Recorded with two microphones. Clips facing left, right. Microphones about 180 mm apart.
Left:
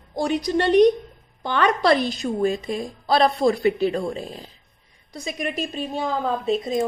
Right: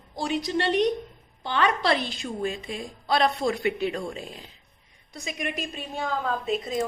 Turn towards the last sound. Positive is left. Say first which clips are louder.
# left 5 dB
turn(degrees=30)  # may be behind; listen again after turning